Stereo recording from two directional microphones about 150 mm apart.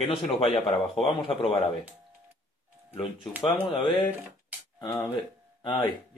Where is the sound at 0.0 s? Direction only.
40° left (ahead or behind).